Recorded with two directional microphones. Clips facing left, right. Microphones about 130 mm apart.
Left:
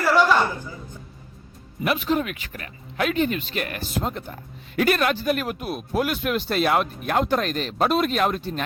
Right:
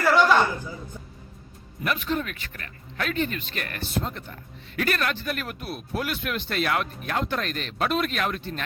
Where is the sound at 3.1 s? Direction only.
40° right (ahead or behind).